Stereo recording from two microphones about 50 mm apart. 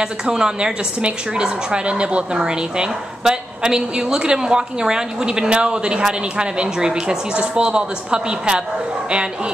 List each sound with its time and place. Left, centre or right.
0.0 s a woman's voice: centre